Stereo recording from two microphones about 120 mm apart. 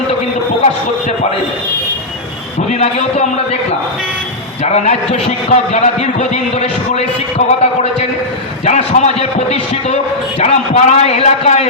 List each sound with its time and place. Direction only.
2.6 s a man's voice: 70° left (ahead or behind)
4.6 s a man's voice: 70° left (ahead or behind)